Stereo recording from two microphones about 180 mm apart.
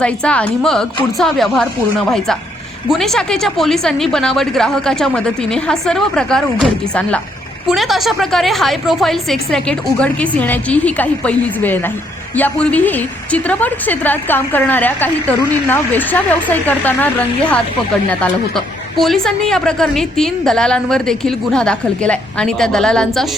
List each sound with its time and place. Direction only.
0.0 s a woman's voice: 5° left (ahead or behind)